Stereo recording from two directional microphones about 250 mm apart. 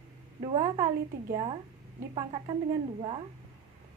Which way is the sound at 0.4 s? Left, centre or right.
Centre.